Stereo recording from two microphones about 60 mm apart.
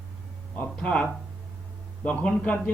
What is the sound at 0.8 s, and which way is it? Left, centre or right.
Speech, centre.